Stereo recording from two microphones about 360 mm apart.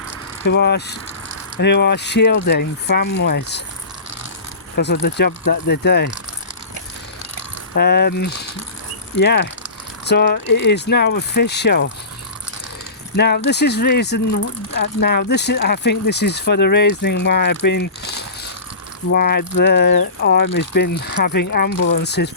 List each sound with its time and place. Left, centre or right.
0.4 s speech: left
4.8 s speech: left
7.8 s speech: left
13.1 s speech: left